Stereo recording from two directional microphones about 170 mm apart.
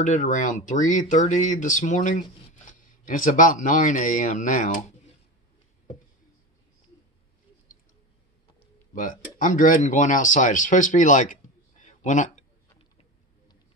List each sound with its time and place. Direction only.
0.0 s speech: 45° left (ahead or behind)
8.9 s speech: 50° left (ahead or behind)
11.8 s a sound: 45° left (ahead or behind)